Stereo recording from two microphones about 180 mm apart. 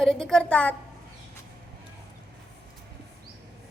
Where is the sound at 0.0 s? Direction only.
5° left (ahead or behind).